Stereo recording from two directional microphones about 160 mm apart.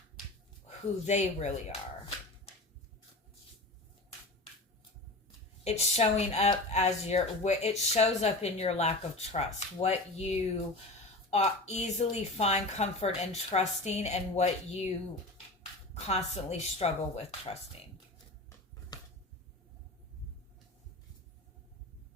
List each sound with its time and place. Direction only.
0.7 s speech: 45° left (ahead or behind)
5.6 s speech: 40° left (ahead or behind)
16.0 s speech: 45° left (ahead or behind)
18.9 s a sound: 25° left (ahead or behind)